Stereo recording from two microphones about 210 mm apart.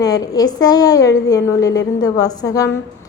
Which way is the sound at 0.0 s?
15° left (ahead or behind).